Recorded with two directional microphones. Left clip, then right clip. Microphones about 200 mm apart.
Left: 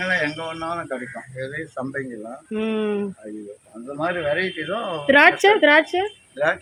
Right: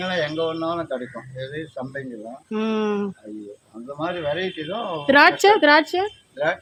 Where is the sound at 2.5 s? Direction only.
5° right (ahead or behind).